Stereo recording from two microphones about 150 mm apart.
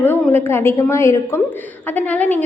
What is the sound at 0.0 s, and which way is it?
A woman's voice, 15° left (ahead or behind).